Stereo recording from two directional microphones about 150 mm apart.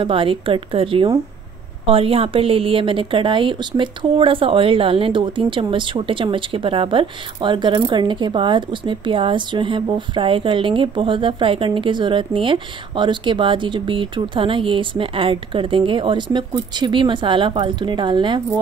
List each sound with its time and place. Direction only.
0.0 s a woman's voice: 35° right (ahead or behind)